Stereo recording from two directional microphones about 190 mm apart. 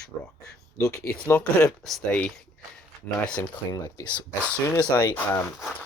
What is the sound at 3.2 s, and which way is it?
Speech, 15° left (ahead or behind).